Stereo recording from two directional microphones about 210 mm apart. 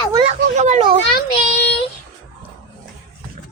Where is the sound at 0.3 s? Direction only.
35° right (ahead or behind).